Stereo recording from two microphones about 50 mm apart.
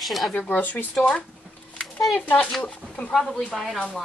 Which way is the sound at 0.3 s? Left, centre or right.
Left.